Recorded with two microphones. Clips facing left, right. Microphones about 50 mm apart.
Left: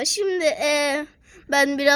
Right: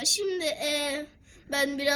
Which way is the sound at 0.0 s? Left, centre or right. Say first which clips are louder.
Left 8 dB; left.